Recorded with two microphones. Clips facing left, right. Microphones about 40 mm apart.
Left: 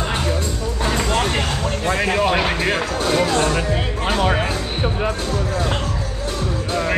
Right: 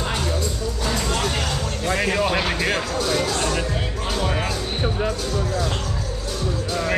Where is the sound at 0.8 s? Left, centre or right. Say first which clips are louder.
Left 4 dB; left.